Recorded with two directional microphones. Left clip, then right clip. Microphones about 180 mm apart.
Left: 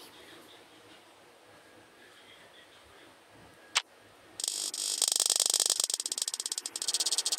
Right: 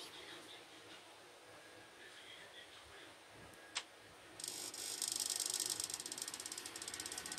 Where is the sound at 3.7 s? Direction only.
60° left (ahead or behind).